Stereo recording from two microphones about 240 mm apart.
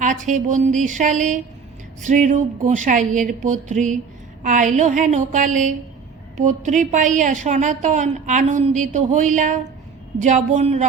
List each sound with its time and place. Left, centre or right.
0.0 s a woman's voice: right